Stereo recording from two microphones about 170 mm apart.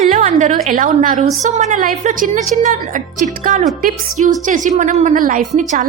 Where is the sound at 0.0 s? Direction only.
45° right (ahead or behind).